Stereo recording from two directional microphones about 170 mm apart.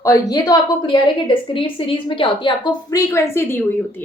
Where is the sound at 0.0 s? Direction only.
20° left (ahead or behind).